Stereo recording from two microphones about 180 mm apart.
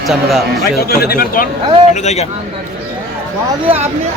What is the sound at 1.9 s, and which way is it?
Speech, 40° left (ahead or behind).